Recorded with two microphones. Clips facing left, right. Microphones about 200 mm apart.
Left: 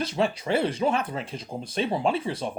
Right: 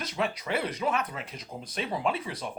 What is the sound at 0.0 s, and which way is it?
Speech, 30° left (ahead or behind).